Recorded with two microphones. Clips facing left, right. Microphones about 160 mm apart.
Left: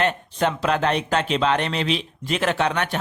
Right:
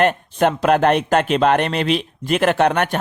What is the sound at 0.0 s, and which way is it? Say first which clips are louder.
Speech: right 6 dB; 55° right (ahead or behind).